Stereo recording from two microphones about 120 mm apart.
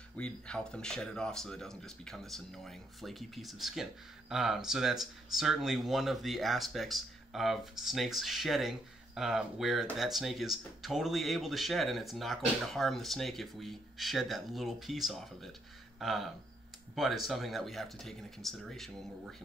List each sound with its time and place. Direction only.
0.2 s speech: 5° left (ahead or behind)